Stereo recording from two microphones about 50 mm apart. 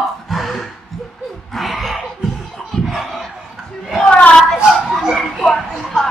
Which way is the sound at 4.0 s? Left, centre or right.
Left.